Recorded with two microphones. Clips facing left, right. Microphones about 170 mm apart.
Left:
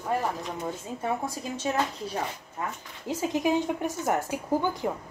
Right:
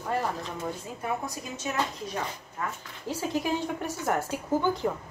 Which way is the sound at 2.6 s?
20° left (ahead or behind).